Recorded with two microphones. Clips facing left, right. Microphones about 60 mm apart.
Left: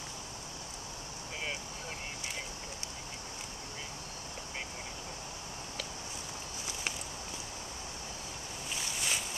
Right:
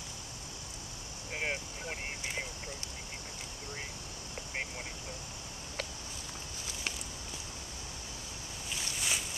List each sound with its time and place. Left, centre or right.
1.3 s vehicle: right
8.7 s boat: centre